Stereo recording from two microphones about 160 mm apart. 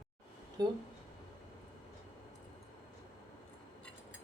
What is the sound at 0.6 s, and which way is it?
Speech, 25° right (ahead or behind).